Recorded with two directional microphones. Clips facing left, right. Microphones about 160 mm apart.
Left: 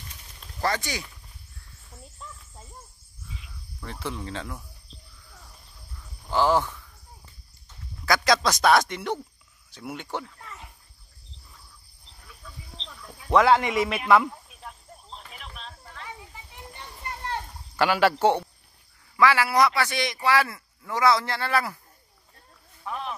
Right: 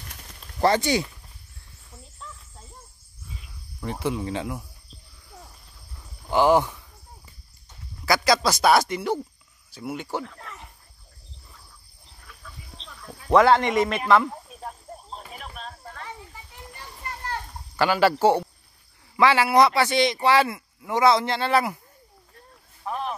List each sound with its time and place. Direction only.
0.6 s a man's voice: 30° right (ahead or behind)
3.8 s speech: 15° right (ahead or behind)
5.9 s a sound: 20° right (ahead or behind)
8.0 s speech: 5° right (ahead or behind)
10.2 s cricket: 80° right
13.3 s speech: centre (ahead or behind)
14.3 s a sound: 40° right (ahead or behind)
16.7 s children playing: 20° left (ahead or behind)
17.7 s speech: centre (ahead or behind)
19.1 s a man's voice: 25° right (ahead or behind)
22.8 s a sound: 40° right (ahead or behind)